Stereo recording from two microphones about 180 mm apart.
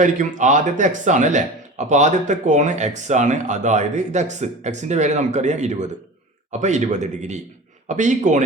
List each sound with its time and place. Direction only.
0.0 s a man's voice: 45° right (ahead or behind)